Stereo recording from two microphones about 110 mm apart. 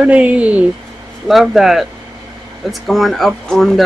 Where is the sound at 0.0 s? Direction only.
10° right (ahead or behind).